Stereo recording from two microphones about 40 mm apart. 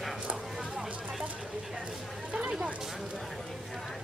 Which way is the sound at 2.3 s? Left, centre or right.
Right.